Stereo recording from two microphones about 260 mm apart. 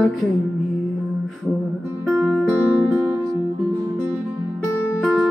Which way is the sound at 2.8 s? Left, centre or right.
Centre.